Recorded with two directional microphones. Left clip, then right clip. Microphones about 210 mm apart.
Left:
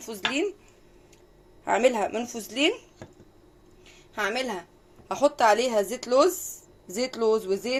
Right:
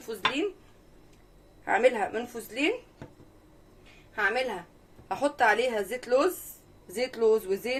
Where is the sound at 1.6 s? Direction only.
35° left (ahead or behind).